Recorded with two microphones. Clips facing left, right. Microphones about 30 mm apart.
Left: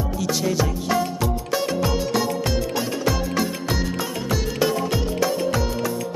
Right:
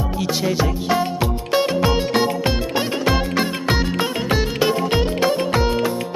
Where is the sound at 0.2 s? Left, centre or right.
Right.